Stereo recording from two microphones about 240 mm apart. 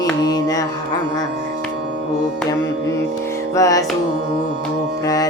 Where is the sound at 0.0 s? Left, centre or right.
Centre.